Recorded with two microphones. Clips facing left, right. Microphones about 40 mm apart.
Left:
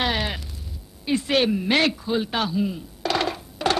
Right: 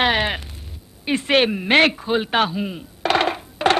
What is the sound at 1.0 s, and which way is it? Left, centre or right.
Speech, right.